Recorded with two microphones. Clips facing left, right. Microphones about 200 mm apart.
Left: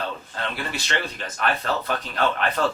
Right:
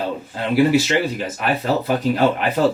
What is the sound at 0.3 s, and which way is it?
Speech, 10° right (ahead or behind).